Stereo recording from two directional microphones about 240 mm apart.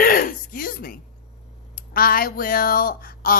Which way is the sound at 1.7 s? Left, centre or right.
Left.